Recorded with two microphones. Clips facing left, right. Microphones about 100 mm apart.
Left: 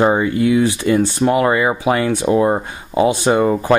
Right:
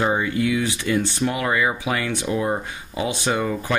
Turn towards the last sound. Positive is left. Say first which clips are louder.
# left 9 dB
turn(degrees=40)  # may be behind; listen again after turning